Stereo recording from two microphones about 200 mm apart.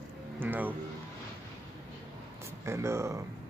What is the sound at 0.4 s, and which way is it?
Music, 10° right (ahead or behind).